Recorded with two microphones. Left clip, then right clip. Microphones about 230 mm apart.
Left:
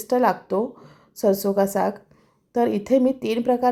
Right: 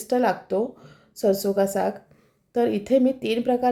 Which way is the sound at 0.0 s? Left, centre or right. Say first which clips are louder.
Left 2 dB; centre.